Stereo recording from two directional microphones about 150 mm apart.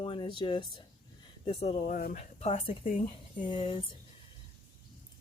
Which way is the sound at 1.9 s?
65° left (ahead or behind).